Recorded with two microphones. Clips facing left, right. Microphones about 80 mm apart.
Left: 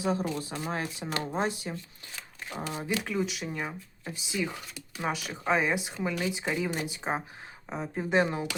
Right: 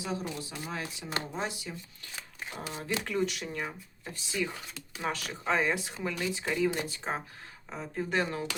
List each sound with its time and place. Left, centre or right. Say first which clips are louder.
0.0 s speech: left 6 dB; left
3.0 s speech: even; centre